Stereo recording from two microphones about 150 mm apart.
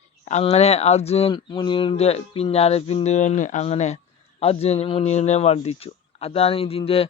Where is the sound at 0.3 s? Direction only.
45° left (ahead or behind).